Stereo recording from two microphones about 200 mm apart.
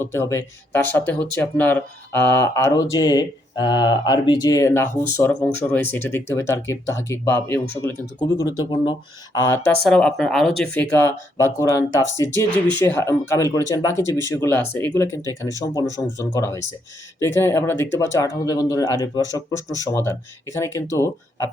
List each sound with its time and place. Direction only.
0.0 s speech: 10° left (ahead or behind)
10.9 s speech: 15° left (ahead or behind)